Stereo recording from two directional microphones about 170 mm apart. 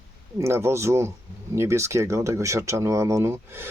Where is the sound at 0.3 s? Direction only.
15° right (ahead or behind).